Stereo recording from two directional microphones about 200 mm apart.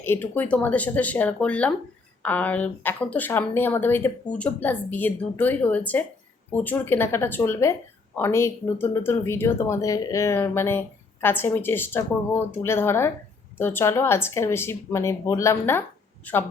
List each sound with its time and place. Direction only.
0.0 s speech: 10° left (ahead or behind)